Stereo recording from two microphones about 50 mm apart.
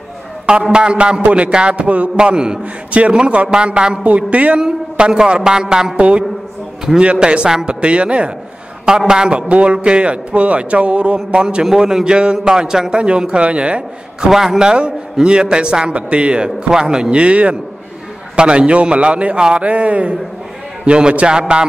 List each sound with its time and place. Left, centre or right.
0.5 s a man's voice: centre
4.6 s a man's voice: centre
14.3 s a man's voice: centre